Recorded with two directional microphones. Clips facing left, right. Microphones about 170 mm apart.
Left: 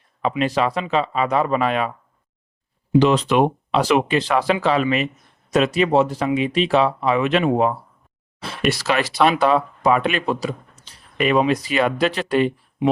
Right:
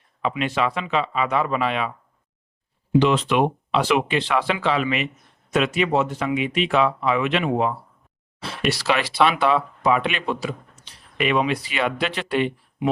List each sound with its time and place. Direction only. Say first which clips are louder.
0.2 s speech: left 3 dB; 40° left (ahead or behind)
3.0 s speech: left 3 dB; 40° left (ahead or behind)